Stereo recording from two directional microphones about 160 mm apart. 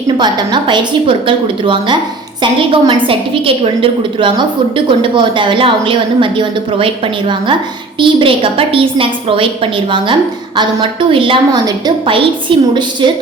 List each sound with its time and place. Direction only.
0.2 s a woman's voice: 30° right (ahead or behind)
10.6 s a woman's voice: 30° right (ahead or behind)